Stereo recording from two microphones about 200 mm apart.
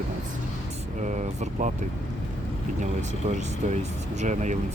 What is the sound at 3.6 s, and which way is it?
Speech, 35° right (ahead or behind).